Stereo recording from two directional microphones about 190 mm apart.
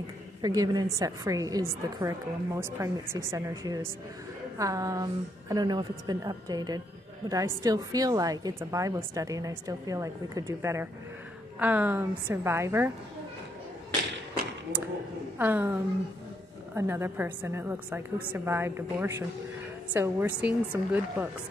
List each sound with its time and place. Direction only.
0.4 s a woman's voice: 20° right (ahead or behind)
15.3 s a woman's voice: 10° right (ahead or behind)